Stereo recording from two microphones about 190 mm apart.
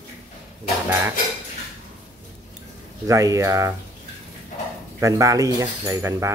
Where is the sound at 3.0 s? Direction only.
15° right (ahead or behind).